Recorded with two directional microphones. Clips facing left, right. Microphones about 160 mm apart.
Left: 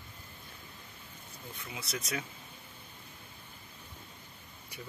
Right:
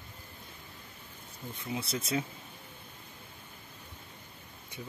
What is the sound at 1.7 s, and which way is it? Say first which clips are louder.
Speech: right 6 dB; 30° right (ahead or behind).